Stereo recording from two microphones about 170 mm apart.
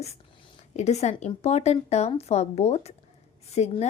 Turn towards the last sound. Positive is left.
turn(degrees=40)  # may be behind; listen again after turning